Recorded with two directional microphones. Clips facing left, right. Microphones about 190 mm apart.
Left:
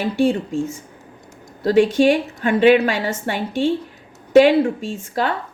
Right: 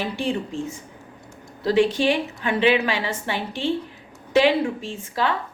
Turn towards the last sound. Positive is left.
turn(degrees=45)  # may be behind; listen again after turning